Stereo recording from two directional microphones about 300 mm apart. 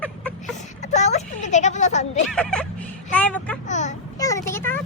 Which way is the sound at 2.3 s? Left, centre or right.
Centre.